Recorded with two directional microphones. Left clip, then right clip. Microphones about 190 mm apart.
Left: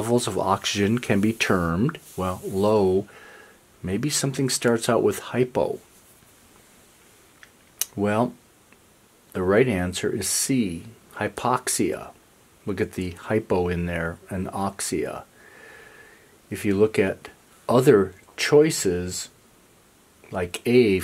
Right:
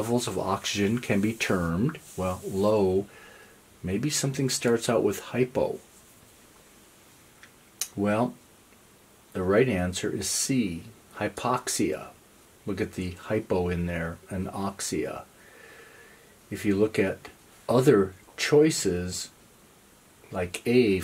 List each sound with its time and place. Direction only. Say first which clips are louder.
0.0 s speech: left 5 dB; 25° left (ahead or behind)
7.8 s speech: left 3 dB; 25° left (ahead or behind)
9.3 s speech: left 3 dB; 25° left (ahead or behind)
16.4 s speech: left 4 dB; 25° left (ahead or behind)
20.2 s speech: left 3 dB; 25° left (ahead or behind)